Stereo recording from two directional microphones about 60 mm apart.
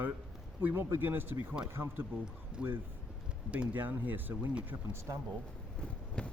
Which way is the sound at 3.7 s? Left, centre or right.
Right.